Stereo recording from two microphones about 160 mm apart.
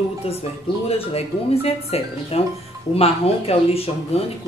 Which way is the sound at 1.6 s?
40° left (ahead or behind).